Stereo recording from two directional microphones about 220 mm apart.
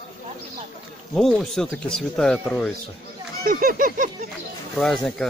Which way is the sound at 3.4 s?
40° right (ahead or behind).